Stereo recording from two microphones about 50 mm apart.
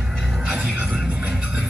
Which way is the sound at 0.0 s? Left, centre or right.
Centre.